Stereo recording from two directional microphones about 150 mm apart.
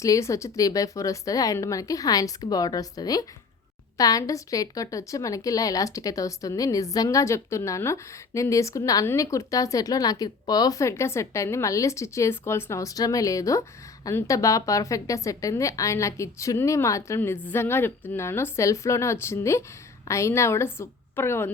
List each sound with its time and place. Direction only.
0.0 s a woman's voice: 20° left (ahead or behind)